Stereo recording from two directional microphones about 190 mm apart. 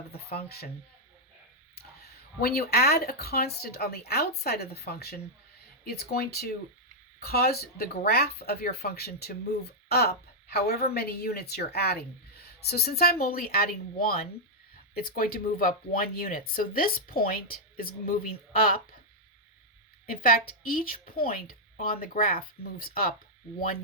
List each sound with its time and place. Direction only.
0.1 s speech: 55° left (ahead or behind)
2.4 s speech: 55° left (ahead or behind)
20.1 s speech: 50° left (ahead or behind)